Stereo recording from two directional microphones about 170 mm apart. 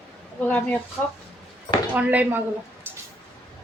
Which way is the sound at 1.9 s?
10° right (ahead or behind).